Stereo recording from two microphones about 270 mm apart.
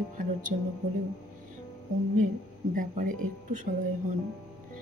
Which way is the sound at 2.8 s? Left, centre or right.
Right.